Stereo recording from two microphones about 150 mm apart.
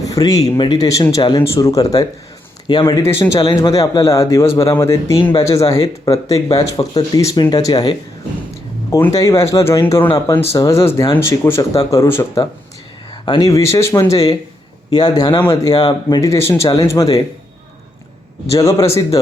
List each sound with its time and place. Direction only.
0.0 s speech: 25° left (ahead or behind)
3.7 s speech: 20° left (ahead or behind)
13.2 s speech: 30° left (ahead or behind)
18.5 s speech: 20° left (ahead or behind)